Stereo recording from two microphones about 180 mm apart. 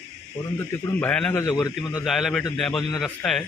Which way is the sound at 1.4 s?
20° left (ahead or behind).